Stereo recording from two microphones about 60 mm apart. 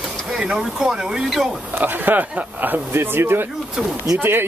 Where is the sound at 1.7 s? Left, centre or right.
Right.